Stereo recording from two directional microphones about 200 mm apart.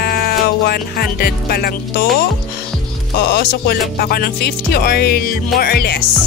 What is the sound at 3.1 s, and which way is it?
Music, 50° left (ahead or behind).